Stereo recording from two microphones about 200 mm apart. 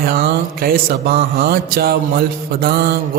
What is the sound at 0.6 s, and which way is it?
Mantra, 50° right (ahead or behind).